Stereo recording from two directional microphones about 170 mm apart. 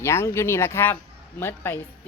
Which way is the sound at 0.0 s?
15° left (ahead or behind).